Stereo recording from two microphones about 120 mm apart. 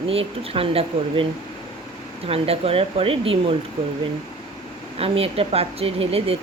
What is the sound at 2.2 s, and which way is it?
Speech, 55° right (ahead or behind).